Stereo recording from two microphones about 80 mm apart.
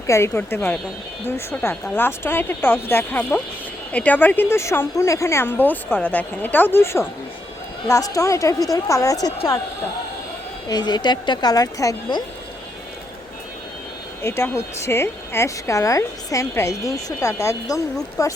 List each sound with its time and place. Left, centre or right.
0.1 s speech: left
7.9 s a woman's voice: left
10.7 s speech: left
14.2 s a woman's voice: left